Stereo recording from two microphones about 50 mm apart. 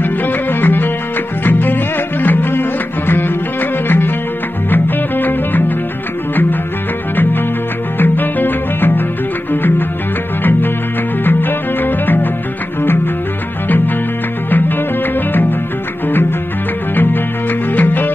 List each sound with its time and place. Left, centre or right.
0.0 s music: left
8.0 s music: left
11.2 s music: left
16.1 s music: left